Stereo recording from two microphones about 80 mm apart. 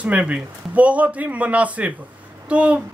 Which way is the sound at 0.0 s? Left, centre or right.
Centre.